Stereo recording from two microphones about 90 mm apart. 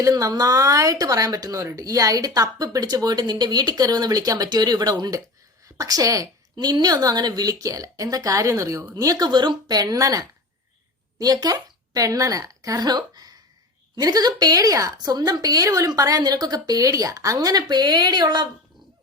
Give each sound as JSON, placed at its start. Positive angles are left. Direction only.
{"t": 0.0, "sound": "a woman's voice", "side_deg": -40}